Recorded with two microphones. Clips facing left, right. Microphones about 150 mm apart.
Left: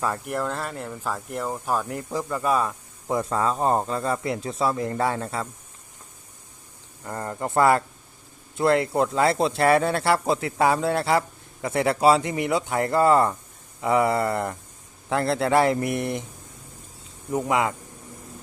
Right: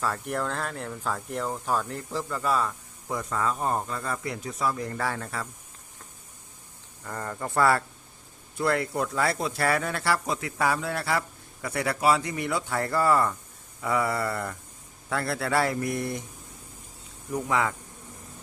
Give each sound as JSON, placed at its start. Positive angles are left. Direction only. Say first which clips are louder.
{"t": 0.3, "sound": "speech", "louder": "left 2 dB", "side_deg": 5}
{"t": 7.0, "sound": "speech", "louder": "left 4 dB", "side_deg": 20}
{"t": 17.3, "sound": "speech", "louder": "left 4 dB", "side_deg": 20}